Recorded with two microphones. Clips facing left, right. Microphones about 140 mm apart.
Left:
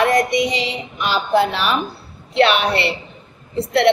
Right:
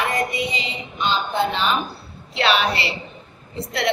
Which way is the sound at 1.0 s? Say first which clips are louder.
Left 4 dB; 85° left.